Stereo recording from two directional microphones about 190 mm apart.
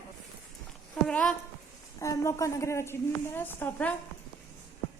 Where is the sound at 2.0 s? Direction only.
15° left (ahead or behind).